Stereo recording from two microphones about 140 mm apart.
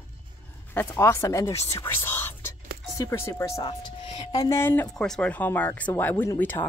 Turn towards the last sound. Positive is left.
turn(degrees=15)  # may be behind; listen again after turning